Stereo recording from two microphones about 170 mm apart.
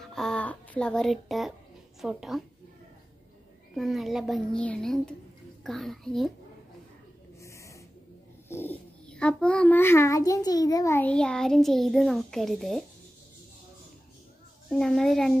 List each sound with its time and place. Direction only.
0.0 s a sound: centre (ahead or behind)
2.0 s a child's voice: centre (ahead or behind)
3.7 s a child's voice: centre (ahead or behind)
7.4 s gasp: 20° left (ahead or behind)
8.5 s a child's voice: 10° left (ahead or behind)
14.7 s a child's voice: centre (ahead or behind)